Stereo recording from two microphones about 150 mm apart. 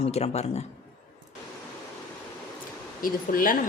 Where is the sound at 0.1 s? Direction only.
45° left (ahead or behind).